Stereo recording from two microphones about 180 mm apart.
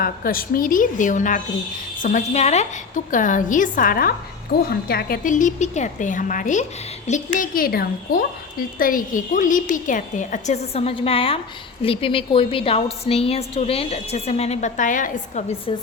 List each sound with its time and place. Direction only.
0.0 s a woman's voice: 55° left (ahead or behind)